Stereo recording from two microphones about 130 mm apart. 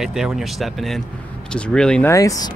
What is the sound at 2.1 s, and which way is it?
Speech, 25° left (ahead or behind).